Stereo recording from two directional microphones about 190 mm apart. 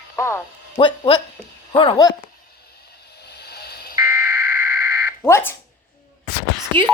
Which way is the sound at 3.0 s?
60° left (ahead or behind).